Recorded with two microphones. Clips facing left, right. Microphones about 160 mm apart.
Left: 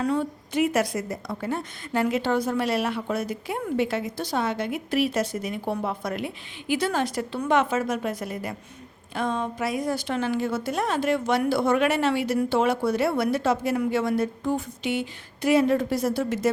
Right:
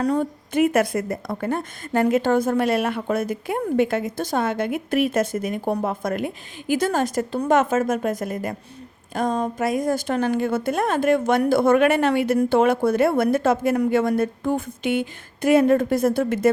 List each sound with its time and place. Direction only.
0.0 s a woman's voice: 45° right (ahead or behind)